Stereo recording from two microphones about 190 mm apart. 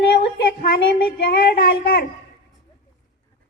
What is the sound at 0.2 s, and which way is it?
Child singing, 55° left (ahead or behind).